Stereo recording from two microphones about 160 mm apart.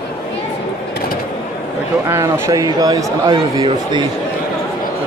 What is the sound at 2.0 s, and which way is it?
A man's voice, 15° right (ahead or behind).